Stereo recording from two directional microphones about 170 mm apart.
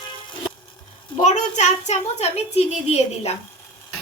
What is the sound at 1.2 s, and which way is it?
A child's voice, 40° left (ahead or behind).